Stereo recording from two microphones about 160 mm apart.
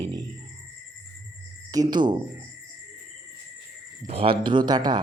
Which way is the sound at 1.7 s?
25° right (ahead or behind).